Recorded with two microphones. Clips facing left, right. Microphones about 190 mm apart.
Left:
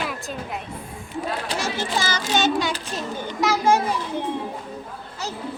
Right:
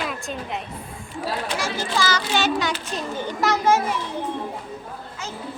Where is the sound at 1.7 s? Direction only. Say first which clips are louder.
Right 2 dB; 20° left (ahead or behind).